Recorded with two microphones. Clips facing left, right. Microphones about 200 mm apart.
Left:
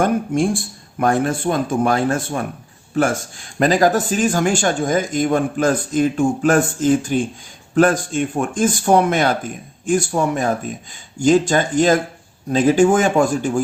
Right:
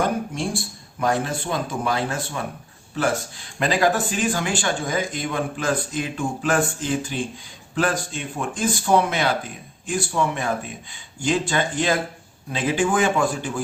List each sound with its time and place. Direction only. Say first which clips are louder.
0.0 s speech: left 7 dB; 50° left (ahead or behind)